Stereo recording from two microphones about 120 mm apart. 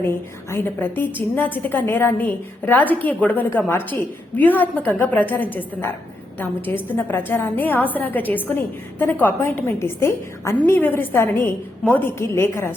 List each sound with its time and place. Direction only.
0.0 s a woman's voice: 20° left (ahead or behind)